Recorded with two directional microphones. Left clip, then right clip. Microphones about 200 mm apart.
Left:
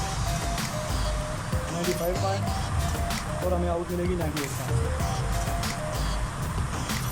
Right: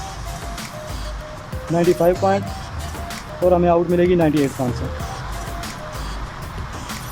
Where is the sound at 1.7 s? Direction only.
Centre (ahead or behind).